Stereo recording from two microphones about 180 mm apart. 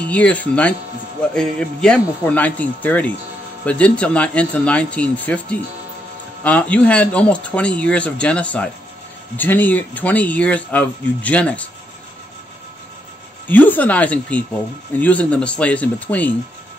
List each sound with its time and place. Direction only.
0.1 s speech: 5° left (ahead or behind)
13.5 s speech: 10° left (ahead or behind)